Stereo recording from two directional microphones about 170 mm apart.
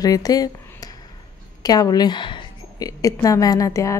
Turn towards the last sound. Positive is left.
turn(degrees=20)  # may be behind; listen again after turning